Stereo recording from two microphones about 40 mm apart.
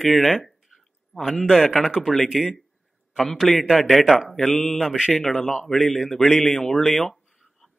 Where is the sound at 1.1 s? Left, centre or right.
Centre.